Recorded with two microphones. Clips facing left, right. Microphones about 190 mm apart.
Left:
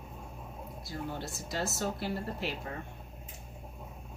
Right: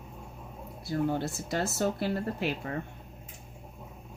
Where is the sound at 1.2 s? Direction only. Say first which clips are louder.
Right 5 dB; 60° right (ahead or behind).